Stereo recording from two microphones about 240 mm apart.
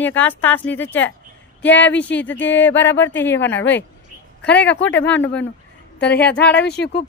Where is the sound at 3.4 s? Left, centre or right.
Left.